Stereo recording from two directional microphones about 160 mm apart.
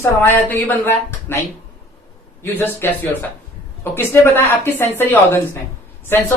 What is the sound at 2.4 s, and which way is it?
Speech, 15° left (ahead or behind).